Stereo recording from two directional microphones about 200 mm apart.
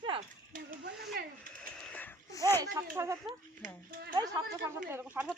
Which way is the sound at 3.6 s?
45° right (ahead or behind).